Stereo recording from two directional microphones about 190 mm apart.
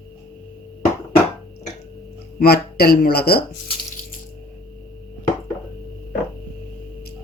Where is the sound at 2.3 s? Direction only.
55° left (ahead or behind).